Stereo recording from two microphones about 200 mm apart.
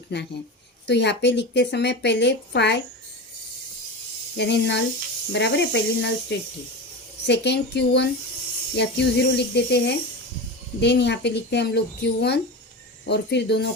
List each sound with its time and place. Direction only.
0.1 s speech: 60° left (ahead or behind)
4.4 s speech: 60° left (ahead or behind)